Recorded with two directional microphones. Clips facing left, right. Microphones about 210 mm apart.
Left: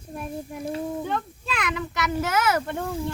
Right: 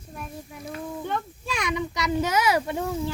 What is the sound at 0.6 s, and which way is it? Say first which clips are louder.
Speech: left 5 dB; 30° left (ahead or behind).